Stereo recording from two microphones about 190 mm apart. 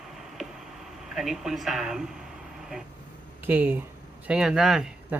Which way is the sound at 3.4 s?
10° right (ahead or behind).